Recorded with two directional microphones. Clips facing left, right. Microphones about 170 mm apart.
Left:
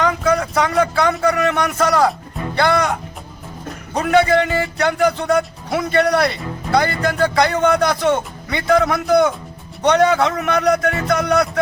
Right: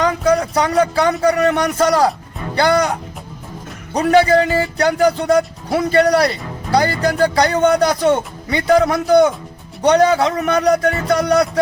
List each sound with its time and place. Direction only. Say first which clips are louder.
0.0 s speech: right 2 dB; 35° right (ahead or behind)
3.9 s speech: right 2 dB; 35° right (ahead or behind)